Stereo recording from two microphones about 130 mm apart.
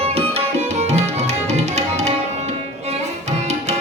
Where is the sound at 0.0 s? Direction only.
50° right (ahead or behind).